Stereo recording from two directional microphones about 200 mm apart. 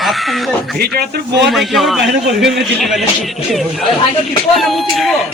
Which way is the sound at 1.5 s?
Centre (ahead or behind).